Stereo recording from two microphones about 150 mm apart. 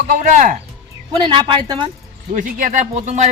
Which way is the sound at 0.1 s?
60° right (ahead or behind).